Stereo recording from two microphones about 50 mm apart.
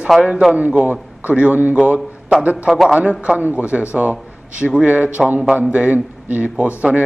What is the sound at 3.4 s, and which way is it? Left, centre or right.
A man's voice, right.